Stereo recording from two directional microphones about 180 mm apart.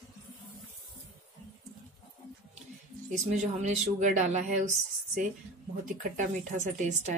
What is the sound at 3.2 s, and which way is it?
Speech, 40° right (ahead or behind).